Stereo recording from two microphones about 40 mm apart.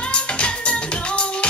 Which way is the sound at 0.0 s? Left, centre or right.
Left.